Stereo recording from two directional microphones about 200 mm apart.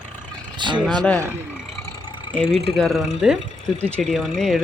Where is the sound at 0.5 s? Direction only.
25° right (ahead or behind).